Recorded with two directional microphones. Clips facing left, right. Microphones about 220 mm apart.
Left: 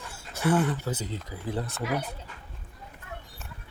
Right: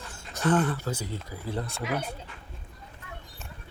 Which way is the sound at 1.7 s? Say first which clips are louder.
Left 1 dB; 20° right (ahead or behind).